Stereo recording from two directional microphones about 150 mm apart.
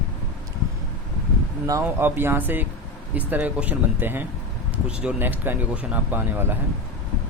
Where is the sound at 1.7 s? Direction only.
15° right (ahead or behind).